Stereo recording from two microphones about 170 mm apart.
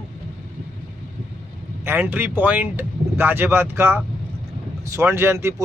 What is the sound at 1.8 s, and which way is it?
Speech, 10° right (ahead or behind).